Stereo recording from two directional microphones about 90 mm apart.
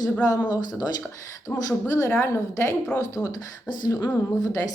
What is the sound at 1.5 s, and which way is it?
Speech, 35° left (ahead or behind).